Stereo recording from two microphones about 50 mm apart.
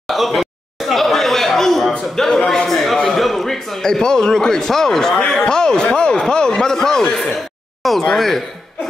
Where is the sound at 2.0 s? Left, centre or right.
Centre.